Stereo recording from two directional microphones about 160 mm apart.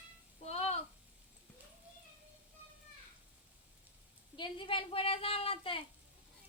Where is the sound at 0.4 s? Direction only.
40° left (ahead or behind).